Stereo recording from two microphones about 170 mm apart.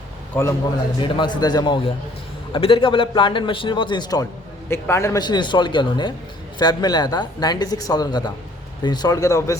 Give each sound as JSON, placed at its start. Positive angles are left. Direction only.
{"t": 0.4, "sound": "a man's voice", "side_deg": 10}
{"t": 0.9, "sound": "a man's voice", "side_deg": 25}